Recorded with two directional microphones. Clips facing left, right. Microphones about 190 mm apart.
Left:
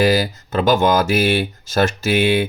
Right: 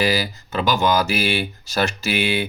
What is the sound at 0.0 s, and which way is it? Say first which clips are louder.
Speech: left 5 dB; 45° left (ahead or behind).